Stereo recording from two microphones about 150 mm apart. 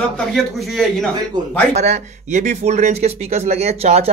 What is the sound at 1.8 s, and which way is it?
Speech, 50° right (ahead or behind).